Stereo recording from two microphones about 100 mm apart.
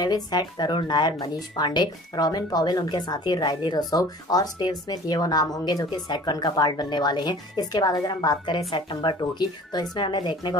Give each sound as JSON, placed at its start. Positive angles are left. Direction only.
{"t": 0.0, "sound": "speech", "side_deg": 40}
{"t": 9.2, "sound": "speech", "side_deg": 45}